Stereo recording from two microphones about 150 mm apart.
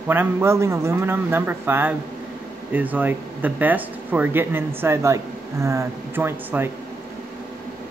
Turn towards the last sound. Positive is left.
turn(degrees=-15)  # may be behind; listen again after turning